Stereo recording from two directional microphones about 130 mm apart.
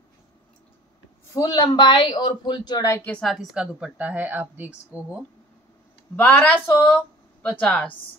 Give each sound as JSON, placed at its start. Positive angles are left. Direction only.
{"t": 1.3, "sound": "speech", "side_deg": 30}
{"t": 3.0, "sound": "speech", "side_deg": 10}
{"t": 3.3, "sound": "a woman's voice", "side_deg": 0}
{"t": 6.1, "sound": "speech", "side_deg": 10}